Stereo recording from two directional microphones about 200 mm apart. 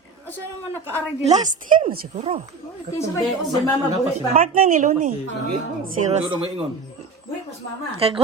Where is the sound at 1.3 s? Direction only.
40° right (ahead or behind).